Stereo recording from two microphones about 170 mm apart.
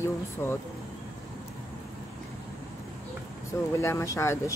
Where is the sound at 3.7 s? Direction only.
15° left (ahead or behind).